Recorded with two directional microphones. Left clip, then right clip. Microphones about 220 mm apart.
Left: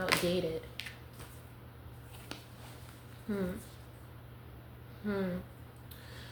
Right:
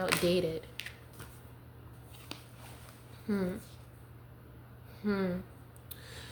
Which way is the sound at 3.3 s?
50° right (ahead or behind).